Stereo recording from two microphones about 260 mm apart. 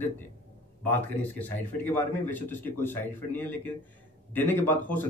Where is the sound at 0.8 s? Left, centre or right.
Centre.